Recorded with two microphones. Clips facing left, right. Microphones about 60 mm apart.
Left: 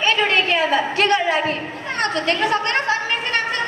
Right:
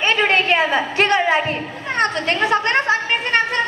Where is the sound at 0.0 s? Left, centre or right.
Right.